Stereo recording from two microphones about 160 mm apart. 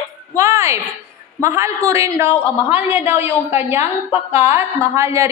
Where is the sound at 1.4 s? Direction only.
15° right (ahead or behind).